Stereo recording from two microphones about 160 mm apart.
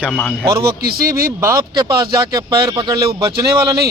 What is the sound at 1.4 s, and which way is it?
Speech, 20° right (ahead or behind).